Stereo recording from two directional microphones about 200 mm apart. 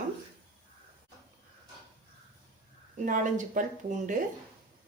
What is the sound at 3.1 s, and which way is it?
A woman's voice, 40° right (ahead or behind).